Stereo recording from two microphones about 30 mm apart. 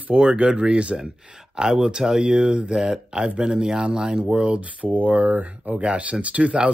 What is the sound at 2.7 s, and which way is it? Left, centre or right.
Speech, right.